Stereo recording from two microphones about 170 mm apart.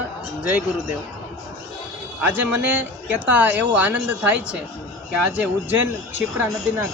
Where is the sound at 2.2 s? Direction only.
10° right (ahead or behind).